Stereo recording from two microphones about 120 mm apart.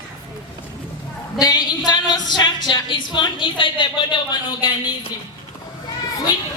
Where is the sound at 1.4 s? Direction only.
35° left (ahead or behind).